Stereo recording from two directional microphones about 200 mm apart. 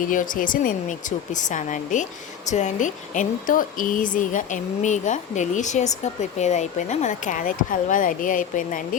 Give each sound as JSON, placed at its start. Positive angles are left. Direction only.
{"t": 0.0, "sound": "speech", "side_deg": 40}